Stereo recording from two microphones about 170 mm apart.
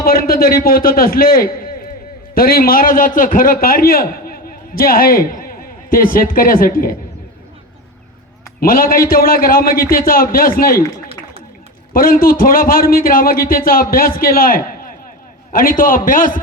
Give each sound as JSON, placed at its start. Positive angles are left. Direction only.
{"t": 0.0, "sound": "a man's voice", "side_deg": 60}
{"t": 8.6, "sound": "a man's voice", "side_deg": 60}
{"t": 11.9, "sound": "a man's voice", "side_deg": 60}